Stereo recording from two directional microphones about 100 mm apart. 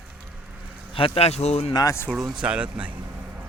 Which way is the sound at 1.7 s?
40° left (ahead or behind).